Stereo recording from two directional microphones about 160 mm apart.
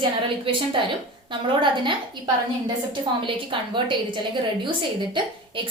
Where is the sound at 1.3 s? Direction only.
30° right (ahead or behind).